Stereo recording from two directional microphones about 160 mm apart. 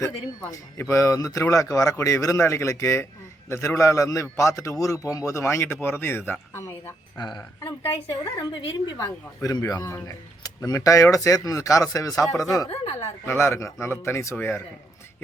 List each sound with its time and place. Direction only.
0.0 s speech: 15° left (ahead or behind)
7.3 s speech: 30° left (ahead or behind)